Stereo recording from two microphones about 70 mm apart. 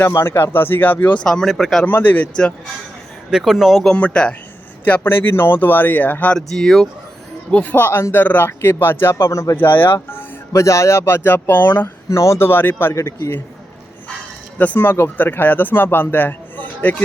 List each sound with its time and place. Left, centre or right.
0.0 s speech: left
1.2 s speech: centre
1.8 s a man's voice: left
3.2 s speech: centre
3.9 s speech: centre
5.0 s a man's voice: left
6.3 s speech: centre
7.5 s a man's voice: left
9.6 s a man's voice: left
10.5 s speech: left
12.0 s speech: left
12.9 s a man's voice: left
14.8 s a man's voice: left